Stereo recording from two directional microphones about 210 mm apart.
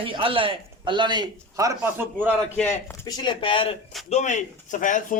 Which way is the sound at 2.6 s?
10° left (ahead or behind).